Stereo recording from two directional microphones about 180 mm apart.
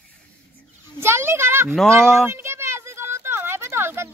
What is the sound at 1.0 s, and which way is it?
Speech, 15° right (ahead or behind).